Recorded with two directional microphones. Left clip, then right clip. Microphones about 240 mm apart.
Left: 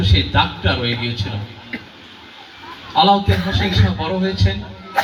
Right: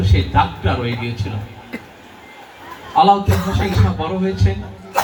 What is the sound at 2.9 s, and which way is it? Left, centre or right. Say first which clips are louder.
A man's voice: right 1 dB; left.